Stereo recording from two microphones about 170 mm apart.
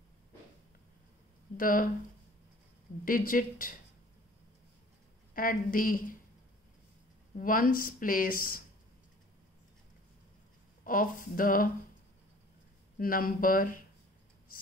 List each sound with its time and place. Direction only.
1.6 s speech: 55° left (ahead or behind)
3.1 s speech: 55° left (ahead or behind)
5.3 s speech: 55° left (ahead or behind)
7.3 s speech: 55° left (ahead or behind)
10.8 s speech: 55° left (ahead or behind)
13.0 s speech: 55° left (ahead or behind)